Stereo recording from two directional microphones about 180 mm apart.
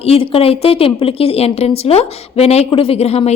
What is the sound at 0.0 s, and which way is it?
A woman's voice, 30° left (ahead or behind).